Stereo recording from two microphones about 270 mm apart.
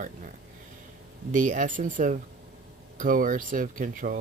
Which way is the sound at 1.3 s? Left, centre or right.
Right.